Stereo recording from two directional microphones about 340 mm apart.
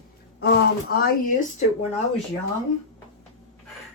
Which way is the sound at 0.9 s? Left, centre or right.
Left.